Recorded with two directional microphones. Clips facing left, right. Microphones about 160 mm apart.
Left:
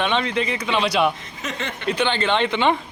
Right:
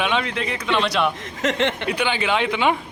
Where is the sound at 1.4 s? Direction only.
90° right.